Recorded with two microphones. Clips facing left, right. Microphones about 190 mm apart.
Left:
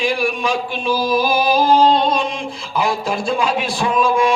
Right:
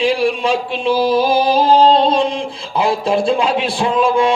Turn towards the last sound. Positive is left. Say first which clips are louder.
# right 2 dB
turn(degrees=-30)  # may be behind; listen again after turning